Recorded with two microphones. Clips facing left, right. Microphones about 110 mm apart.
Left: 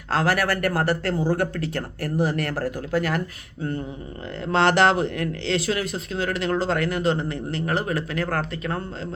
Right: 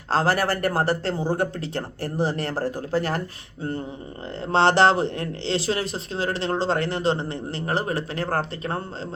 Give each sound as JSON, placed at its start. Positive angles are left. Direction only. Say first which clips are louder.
{"t": 0.1, "sound": "speech", "louder": "right 1 dB", "side_deg": -30}
{"t": 4.5, "sound": "speech", "louder": "right 1 dB", "side_deg": -30}